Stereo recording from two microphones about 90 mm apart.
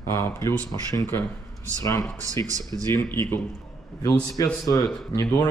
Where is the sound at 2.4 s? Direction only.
40° right (ahead or behind).